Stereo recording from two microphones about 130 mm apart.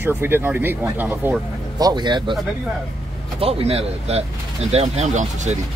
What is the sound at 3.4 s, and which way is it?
Speech, 50° right (ahead or behind).